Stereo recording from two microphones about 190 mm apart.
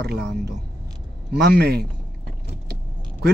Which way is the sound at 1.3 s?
60° right (ahead or behind).